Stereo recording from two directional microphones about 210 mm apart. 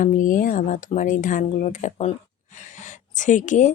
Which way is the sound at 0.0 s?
40° left (ahead or behind).